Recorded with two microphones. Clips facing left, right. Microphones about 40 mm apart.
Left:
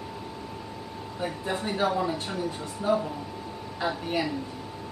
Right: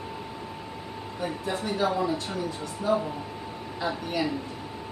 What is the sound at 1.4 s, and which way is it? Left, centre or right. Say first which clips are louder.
A woman's voice: even; centre.